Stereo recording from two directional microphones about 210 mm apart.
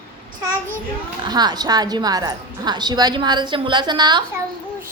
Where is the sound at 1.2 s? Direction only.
20° right (ahead or behind).